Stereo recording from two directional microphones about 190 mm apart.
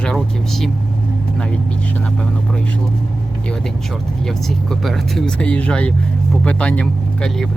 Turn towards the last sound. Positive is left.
turn(degrees=5)  # may be behind; listen again after turning